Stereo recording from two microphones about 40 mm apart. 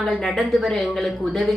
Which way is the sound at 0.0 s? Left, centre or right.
Centre.